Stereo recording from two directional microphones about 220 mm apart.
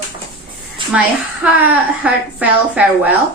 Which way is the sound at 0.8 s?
20° right (ahead or behind).